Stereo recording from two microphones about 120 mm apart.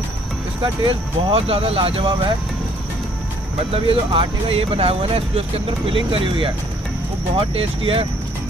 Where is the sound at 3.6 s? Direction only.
50° right (ahead or behind).